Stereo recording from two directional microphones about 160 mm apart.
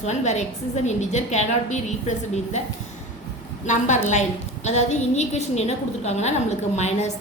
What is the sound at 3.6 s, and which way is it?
A woman's voice, 50° left (ahead or behind).